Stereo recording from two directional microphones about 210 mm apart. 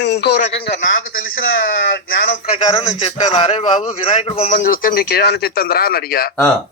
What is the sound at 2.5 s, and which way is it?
A man's voice, 25° left (ahead or behind).